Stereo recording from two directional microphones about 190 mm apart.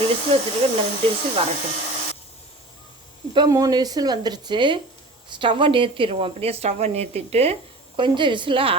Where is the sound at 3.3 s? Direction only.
20° right (ahead or behind).